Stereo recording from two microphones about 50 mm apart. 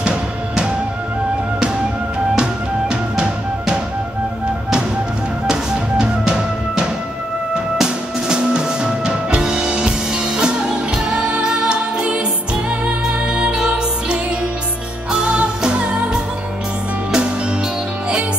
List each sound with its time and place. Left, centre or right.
0.0 s music: centre
2.9 s music: centre
5.5 s music: centre